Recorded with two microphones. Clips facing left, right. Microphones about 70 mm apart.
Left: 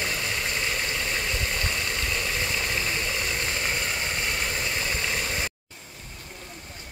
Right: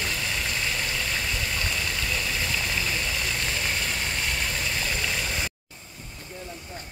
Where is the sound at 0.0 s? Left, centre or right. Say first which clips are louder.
Left 1 dB; left.